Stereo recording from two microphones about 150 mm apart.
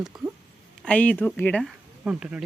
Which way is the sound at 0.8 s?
10° left (ahead or behind).